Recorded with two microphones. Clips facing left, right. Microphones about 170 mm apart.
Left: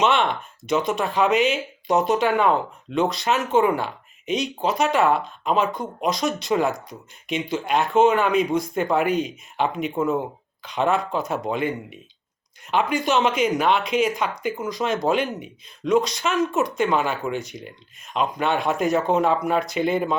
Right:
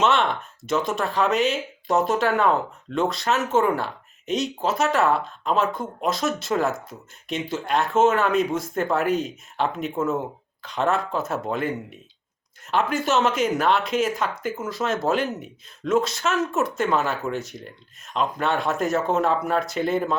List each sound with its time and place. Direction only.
0.0 s speech: centre (ahead or behind)
9.9 s speech: 15° left (ahead or behind)
10.2 s speech: centre (ahead or behind)